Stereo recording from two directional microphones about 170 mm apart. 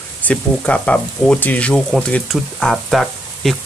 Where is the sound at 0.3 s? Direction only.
5° left (ahead or behind).